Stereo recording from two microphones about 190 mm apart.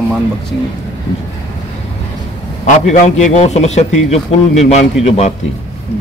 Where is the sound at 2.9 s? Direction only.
35° left (ahead or behind).